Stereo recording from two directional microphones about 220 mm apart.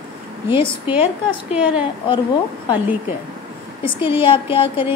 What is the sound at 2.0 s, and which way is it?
Speech, 20° left (ahead or behind).